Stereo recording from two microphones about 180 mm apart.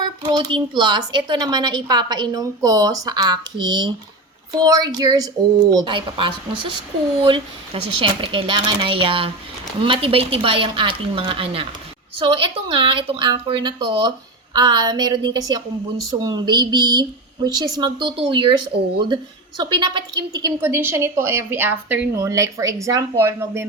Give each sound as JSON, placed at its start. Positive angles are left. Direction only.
{"t": 0.0, "sound": "speech", "side_deg": -25}